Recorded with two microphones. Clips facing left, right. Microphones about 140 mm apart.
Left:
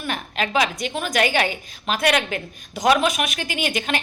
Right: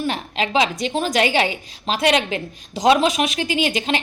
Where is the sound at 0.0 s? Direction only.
25° right (ahead or behind).